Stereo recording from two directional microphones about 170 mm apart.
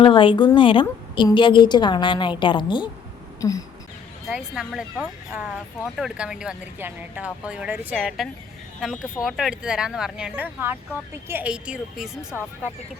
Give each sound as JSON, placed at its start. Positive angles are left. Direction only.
{"t": 0.0, "sound": "a woman's voice", "side_deg": 30}
{"t": 4.3, "sound": "speech", "side_deg": 0}